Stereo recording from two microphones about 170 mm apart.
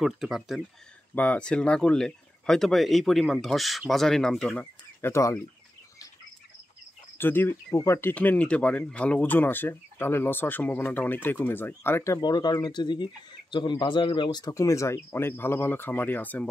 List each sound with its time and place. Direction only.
0.0 s speech: centre (ahead or behind); by 5.4 s 15° left (ahead or behind)
7.2 s speech: 10° left (ahead or behind)